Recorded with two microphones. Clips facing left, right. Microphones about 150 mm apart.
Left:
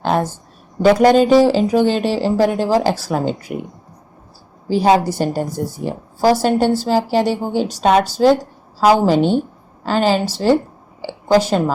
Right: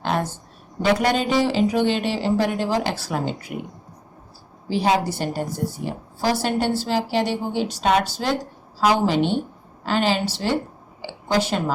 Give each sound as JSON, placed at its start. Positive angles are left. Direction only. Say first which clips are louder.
{"t": 0.0, "sound": "a woman's voice", "louder": "left 6 dB", "side_deg": 40}
{"t": 4.7, "sound": "a woman's voice", "louder": "left 6 dB", "side_deg": 40}
{"t": 11.0, "sound": "a sound", "louder": "left 8 dB", "side_deg": 40}